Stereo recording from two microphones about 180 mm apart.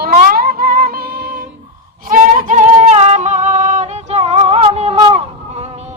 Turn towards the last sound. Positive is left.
turn(degrees=-35)  # may be behind; listen again after turning